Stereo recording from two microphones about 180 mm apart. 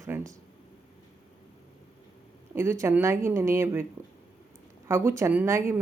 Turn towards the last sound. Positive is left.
turn(degrees=-15)  # may be behind; listen again after turning